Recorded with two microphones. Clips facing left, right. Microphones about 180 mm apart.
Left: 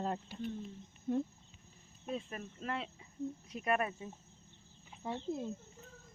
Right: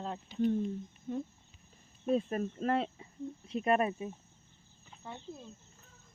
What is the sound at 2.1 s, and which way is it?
Speech, 40° right (ahead or behind).